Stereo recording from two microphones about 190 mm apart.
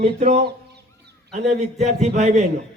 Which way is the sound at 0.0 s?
35° right (ahead or behind).